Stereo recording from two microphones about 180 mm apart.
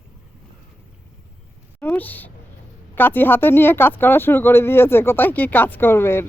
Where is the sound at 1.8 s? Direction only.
10° left (ahead or behind).